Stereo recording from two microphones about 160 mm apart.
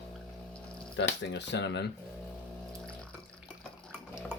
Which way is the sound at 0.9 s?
85° left.